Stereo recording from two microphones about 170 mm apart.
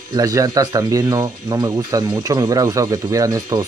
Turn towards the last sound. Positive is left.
turn(degrees=-20)  # may be behind; listen again after turning